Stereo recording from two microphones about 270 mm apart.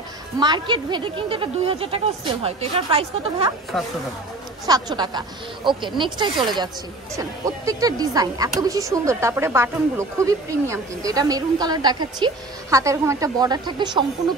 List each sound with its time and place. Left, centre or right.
0.4 s speech: centre
3.7 s speech: centre
4.6 s speech: centre